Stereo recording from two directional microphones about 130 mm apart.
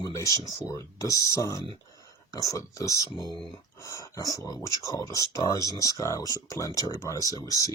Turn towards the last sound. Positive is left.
turn(degrees=25)  # may be behind; listen again after turning